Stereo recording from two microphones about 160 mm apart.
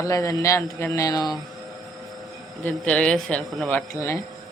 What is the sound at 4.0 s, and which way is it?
Speech, 20° left (ahead or behind).